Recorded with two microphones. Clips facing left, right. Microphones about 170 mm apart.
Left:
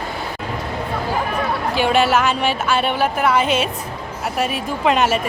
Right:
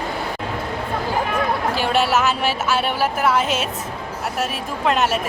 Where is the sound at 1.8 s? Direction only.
Centre (ahead or behind).